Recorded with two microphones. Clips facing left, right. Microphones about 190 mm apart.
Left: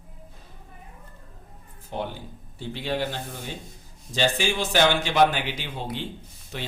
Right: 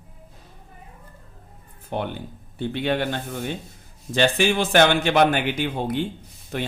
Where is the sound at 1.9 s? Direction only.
60° right (ahead or behind).